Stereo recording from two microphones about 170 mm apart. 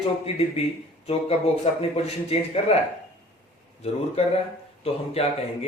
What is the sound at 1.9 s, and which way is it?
Speech, 35° left (ahead or behind).